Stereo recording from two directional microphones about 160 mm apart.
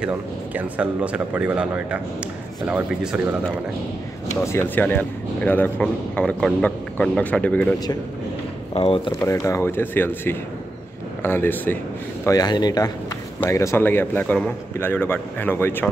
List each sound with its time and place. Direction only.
0.6 s speech: 10° right (ahead or behind)
4.5 s speech: 15° left (ahead or behind)
8.7 s speech: 35° left (ahead or behind)
9.2 s speech: 20° left (ahead or behind)
12.3 s speech: 25° left (ahead or behind)